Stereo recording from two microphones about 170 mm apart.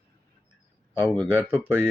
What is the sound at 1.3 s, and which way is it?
Speech, 10° right (ahead or behind).